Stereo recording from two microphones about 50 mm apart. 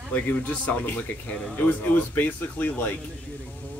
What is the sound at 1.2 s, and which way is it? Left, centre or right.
Speech, left.